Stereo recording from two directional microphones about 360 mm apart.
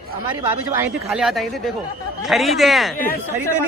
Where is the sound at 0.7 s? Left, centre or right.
Centre.